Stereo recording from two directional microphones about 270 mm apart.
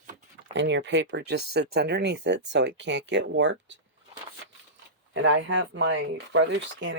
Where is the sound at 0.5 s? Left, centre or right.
Right.